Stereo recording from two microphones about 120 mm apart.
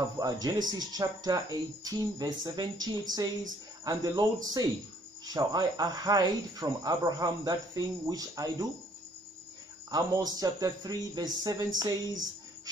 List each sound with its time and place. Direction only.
0.2 s speech: 35° right (ahead or behind)
9.8 s speech: 30° right (ahead or behind)